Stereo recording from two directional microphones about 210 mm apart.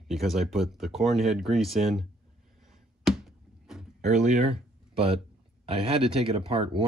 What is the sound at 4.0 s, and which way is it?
Speech, 35° right (ahead or behind).